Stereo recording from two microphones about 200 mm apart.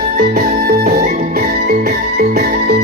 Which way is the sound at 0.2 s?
50° right (ahead or behind).